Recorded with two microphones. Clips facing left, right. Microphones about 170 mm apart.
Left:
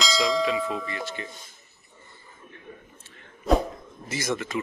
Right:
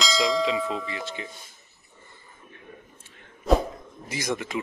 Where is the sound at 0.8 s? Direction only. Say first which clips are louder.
Even; 15° right (ahead or behind).